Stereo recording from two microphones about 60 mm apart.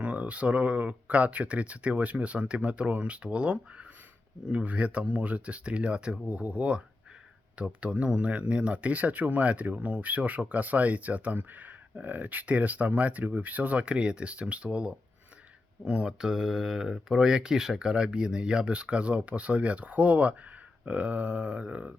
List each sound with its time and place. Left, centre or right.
0.0 s speech: right
16.1 s speech: centre